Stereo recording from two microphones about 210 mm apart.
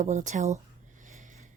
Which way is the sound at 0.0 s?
35° right (ahead or behind).